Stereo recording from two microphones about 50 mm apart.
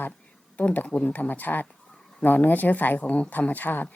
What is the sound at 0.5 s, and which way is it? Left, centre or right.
Speech, left.